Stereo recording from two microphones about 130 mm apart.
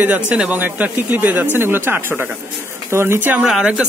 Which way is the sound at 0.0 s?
10° right (ahead or behind).